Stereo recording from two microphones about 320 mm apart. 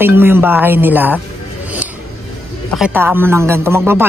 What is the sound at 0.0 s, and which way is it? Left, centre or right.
A woman's voice, centre.